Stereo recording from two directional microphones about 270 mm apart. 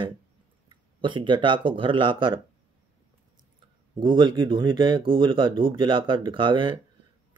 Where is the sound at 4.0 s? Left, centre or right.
Centre.